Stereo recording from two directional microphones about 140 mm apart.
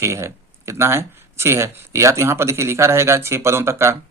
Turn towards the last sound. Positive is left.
turn(degrees=-20)  # may be behind; listen again after turning